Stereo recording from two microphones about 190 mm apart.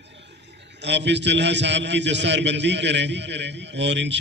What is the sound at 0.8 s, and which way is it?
A man's voice, 65° right (ahead or behind).